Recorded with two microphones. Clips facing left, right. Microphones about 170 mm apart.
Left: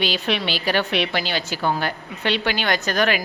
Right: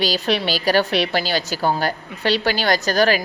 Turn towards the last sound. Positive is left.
turn(degrees=-35)  # may be behind; listen again after turning